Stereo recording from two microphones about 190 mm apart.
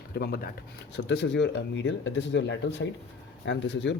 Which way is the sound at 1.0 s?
70° left (ahead or behind).